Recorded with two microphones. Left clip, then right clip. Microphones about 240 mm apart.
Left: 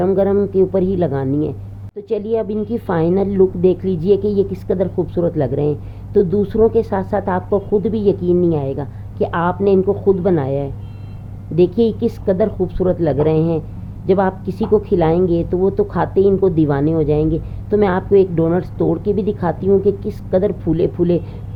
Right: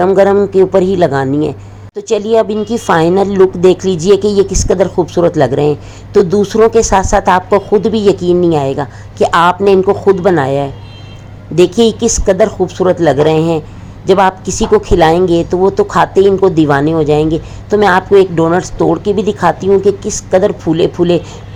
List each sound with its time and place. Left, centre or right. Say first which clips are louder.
0.0 s speech: right 7 dB; centre